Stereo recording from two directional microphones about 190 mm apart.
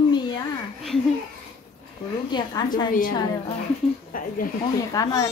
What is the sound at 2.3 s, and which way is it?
Speech, 20° left (ahead or behind).